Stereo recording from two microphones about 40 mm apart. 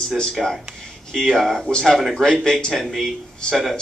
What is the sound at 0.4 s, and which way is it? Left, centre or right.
Speech, centre.